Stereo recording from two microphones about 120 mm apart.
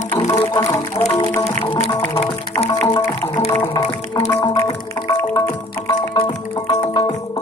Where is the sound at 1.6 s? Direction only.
50° left (ahead or behind).